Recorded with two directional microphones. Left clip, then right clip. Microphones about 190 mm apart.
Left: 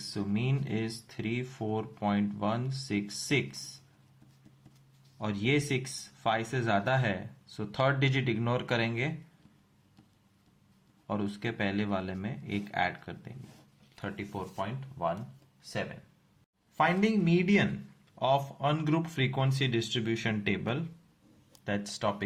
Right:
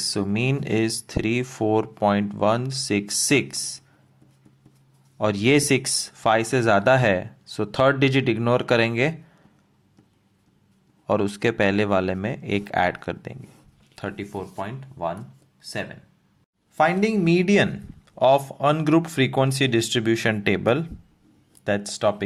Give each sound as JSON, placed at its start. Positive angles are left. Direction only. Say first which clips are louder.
{"t": 0.1, "sound": "speech", "louder": "right 6 dB", "side_deg": -45}
{"t": 5.1, "sound": "speech", "louder": "right 11 dB", "side_deg": -50}
{"t": 11.0, "sound": "speech", "louder": "right 13 dB", "side_deg": -45}
{"t": 13.9, "sound": "speech", "louder": "right 7 dB", "side_deg": -35}
{"t": 16.7, "sound": "speech", "louder": "right 7 dB", "side_deg": -35}
{"t": 21.6, "sound": "speech", "louder": "right 10 dB", "side_deg": -35}